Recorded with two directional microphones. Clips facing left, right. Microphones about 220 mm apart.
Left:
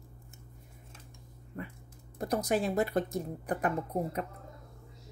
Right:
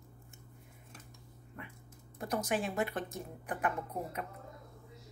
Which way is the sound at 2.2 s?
35° left (ahead or behind).